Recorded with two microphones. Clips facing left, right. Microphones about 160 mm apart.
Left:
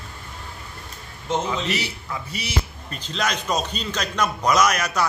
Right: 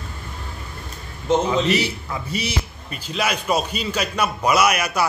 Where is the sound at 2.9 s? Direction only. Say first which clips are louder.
Right 2 dB; 10° right (ahead or behind).